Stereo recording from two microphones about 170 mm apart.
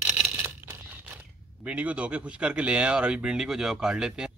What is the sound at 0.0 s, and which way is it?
Speech, 5° right (ahead or behind).